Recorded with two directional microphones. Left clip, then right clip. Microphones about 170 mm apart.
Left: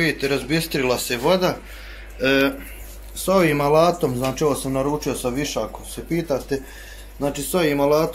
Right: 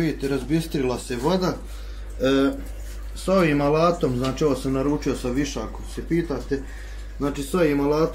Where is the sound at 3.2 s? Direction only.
25° left (ahead or behind); by 8.1 s 10° left (ahead or behind).